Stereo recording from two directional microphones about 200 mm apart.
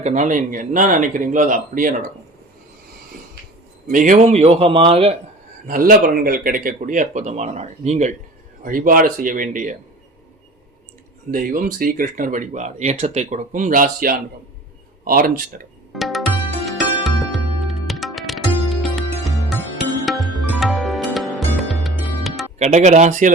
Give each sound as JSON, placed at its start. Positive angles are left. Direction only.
{"t": 0.0, "sound": "speech", "side_deg": -40}
{"t": 3.8, "sound": "speech", "side_deg": -40}
{"t": 5.6, "sound": "speech", "side_deg": -45}
{"t": 11.3, "sound": "speech", "side_deg": -45}
{"t": 15.9, "sound": "music", "side_deg": 0}
{"t": 22.5, "sound": "speech", "side_deg": -35}